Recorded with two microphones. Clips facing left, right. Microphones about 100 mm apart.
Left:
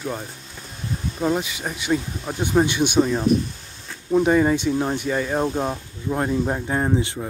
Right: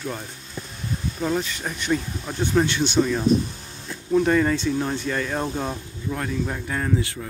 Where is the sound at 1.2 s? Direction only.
15° left (ahead or behind).